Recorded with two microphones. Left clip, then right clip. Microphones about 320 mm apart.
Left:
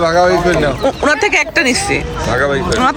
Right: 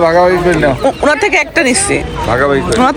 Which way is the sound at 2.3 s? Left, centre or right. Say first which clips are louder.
Right 3 dB; centre.